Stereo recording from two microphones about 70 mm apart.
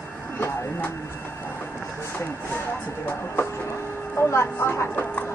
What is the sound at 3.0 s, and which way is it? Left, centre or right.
Speech, left.